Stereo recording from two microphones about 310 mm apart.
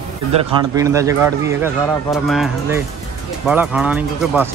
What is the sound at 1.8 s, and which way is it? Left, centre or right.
Speech, centre.